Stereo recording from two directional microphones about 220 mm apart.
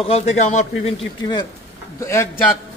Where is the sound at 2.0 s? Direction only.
15° left (ahead or behind).